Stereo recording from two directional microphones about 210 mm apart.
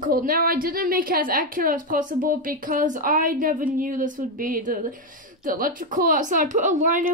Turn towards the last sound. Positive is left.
turn(degrees=-40)  # may be behind; listen again after turning